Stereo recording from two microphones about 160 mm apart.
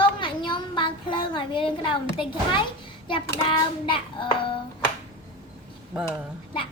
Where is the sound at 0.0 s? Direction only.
30° left (ahead or behind).